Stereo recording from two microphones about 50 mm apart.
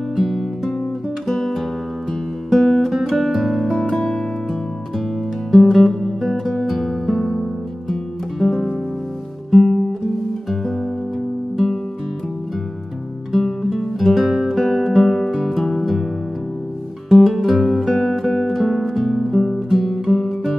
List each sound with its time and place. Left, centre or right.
0.1 s music: centre
11.5 s music: centre
13.3 s music: centre
17.2 s music: centre